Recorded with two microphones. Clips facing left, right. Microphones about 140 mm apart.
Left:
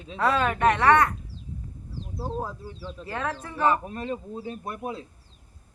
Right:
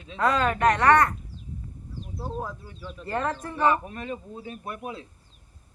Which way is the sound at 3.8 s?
30° left (ahead or behind).